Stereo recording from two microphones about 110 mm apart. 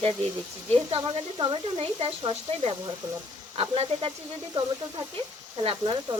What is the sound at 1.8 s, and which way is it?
Speech, 60° right (ahead or behind).